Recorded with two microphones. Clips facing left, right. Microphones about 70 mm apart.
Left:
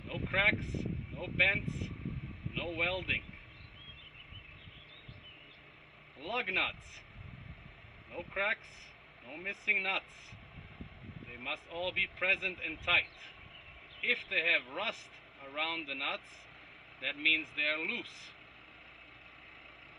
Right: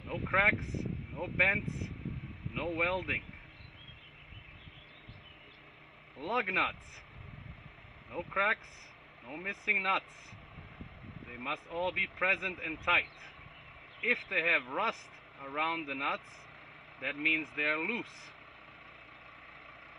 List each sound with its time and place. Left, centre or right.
0.1 s vehicle: right
1.1 s speech: right
6.1 s speech: right
8.3 s speech: right
11.3 s speech: right